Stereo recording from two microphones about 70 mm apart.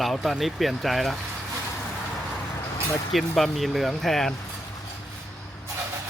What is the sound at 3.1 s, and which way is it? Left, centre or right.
Speech, centre.